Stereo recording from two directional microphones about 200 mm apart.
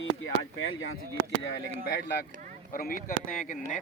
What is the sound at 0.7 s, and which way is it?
Speech, 85° left.